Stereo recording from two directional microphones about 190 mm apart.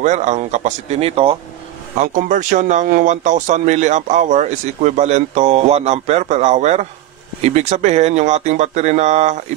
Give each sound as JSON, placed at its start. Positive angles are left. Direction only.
{"t": 0.0, "sound": "speech", "side_deg": -40}
{"t": 2.0, "sound": "speech", "side_deg": -40}